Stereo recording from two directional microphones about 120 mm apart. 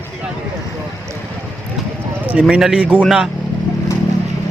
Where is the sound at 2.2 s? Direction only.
10° right (ahead or behind).